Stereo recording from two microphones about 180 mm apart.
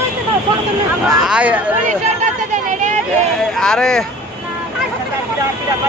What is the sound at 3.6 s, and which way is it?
Speech, 5° left (ahead or behind).